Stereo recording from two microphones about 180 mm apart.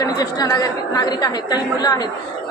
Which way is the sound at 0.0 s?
20° left (ahead or behind).